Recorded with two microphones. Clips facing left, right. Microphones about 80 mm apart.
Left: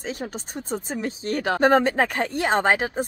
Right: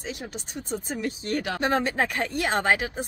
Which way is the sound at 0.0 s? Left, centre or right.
Left.